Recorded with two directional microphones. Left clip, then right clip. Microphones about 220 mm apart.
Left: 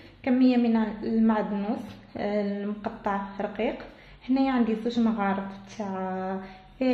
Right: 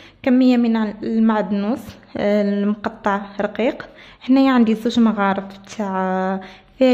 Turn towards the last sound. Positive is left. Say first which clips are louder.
# right 13 dB
turn(degrees=-50)  # may be behind; listen again after turning